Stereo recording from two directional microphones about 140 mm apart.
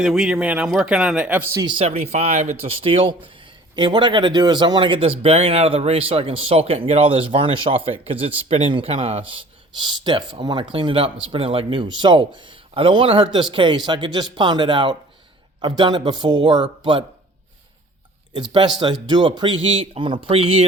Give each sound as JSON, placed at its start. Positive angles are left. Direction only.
{"t": 0.0, "sound": "a man's voice", "side_deg": -5}
{"t": 1.5, "sound": "speech", "side_deg": -35}
{"t": 18.5, "sound": "speech", "side_deg": -35}